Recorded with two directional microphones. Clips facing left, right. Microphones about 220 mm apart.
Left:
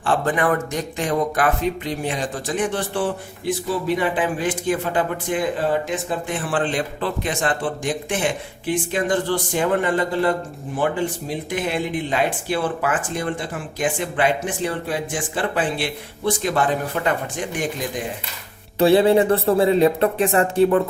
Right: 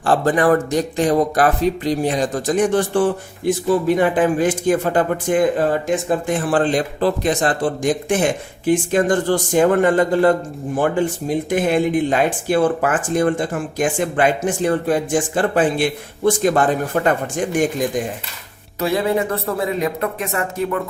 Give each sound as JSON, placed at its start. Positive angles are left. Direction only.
{"t": 0.0, "sound": "speech", "side_deg": -35}
{"t": 18.8, "sound": "speech", "side_deg": 30}